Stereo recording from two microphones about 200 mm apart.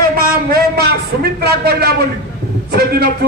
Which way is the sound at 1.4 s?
50° right (ahead or behind).